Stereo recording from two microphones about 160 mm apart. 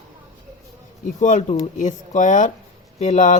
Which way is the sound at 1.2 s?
45° left (ahead or behind).